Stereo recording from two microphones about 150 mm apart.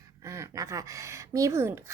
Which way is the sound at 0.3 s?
20° right (ahead or behind).